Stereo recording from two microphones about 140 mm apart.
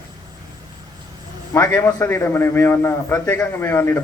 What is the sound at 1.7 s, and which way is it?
A man's voice, 15° left (ahead or behind).